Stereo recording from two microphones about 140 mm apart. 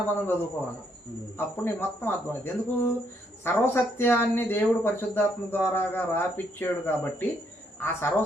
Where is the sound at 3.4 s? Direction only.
15° left (ahead or behind).